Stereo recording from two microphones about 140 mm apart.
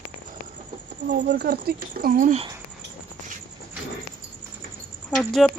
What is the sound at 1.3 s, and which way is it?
Speech, 90° right.